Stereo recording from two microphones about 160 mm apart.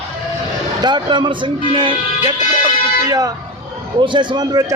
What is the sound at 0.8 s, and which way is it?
A man's voice, 25° right (ahead or behind).